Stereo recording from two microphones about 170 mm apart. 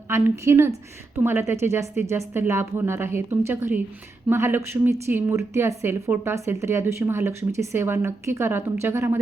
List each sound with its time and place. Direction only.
0.1 s speech: 15° right (ahead or behind)